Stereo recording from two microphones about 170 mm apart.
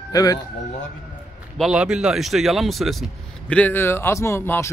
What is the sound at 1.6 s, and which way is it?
Speech, 5° right (ahead or behind).